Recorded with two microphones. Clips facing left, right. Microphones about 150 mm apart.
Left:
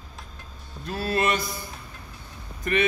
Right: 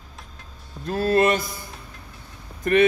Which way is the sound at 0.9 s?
45° right (ahead or behind).